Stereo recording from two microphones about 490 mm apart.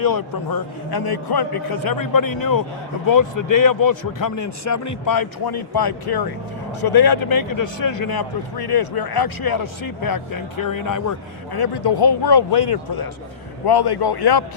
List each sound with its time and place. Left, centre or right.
0.0 s a man's voice: left